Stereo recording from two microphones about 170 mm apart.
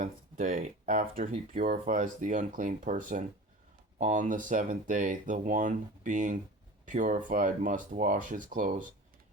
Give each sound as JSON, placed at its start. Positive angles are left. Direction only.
{"t": 0.0, "sound": "speech", "side_deg": -50}